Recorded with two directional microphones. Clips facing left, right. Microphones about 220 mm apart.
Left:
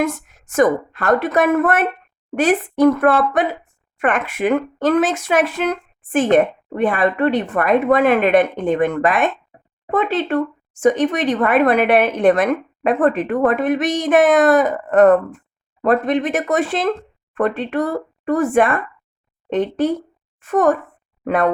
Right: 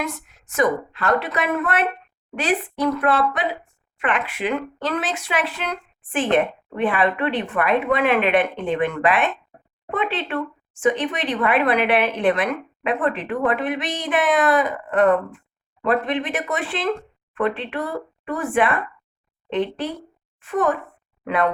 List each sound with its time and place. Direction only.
0.0 s speech: 45° left (ahead or behind)